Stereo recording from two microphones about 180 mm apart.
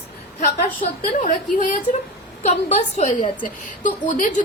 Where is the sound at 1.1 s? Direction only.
45° left (ahead or behind).